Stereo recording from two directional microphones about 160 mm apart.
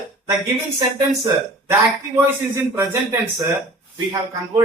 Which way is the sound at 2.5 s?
15° right (ahead or behind).